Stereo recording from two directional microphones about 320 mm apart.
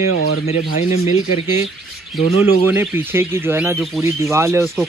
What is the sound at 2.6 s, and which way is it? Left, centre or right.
Speech, centre.